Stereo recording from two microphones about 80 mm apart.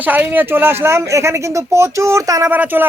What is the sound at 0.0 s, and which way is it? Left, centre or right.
Speech, right.